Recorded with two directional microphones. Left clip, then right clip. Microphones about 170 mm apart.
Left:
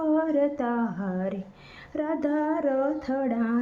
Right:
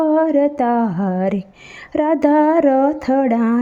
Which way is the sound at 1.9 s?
45° right (ahead or behind).